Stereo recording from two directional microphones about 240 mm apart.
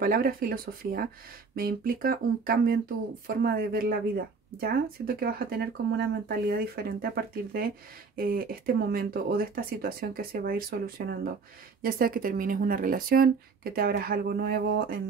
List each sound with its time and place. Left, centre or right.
0.0 s speech: right
8.2 s speech: right